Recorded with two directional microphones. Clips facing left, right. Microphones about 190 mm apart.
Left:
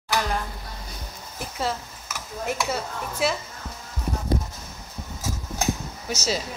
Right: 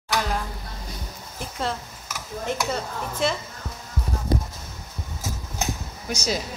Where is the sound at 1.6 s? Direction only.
5° left (ahead or behind).